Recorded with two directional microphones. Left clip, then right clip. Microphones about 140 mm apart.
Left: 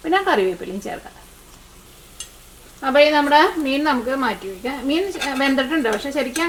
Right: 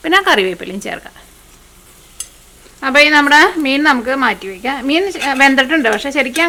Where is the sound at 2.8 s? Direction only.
35° right (ahead or behind).